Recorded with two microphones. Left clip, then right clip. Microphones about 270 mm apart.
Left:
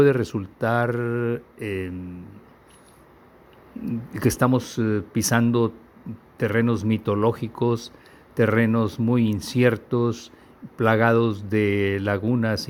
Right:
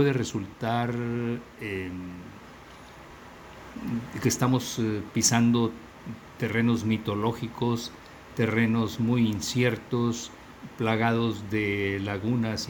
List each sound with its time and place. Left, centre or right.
0.0 s speech: left
4.1 s speech: left